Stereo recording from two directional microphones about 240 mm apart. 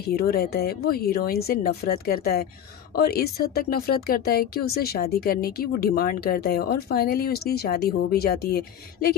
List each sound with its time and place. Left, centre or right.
0.0 s speech: left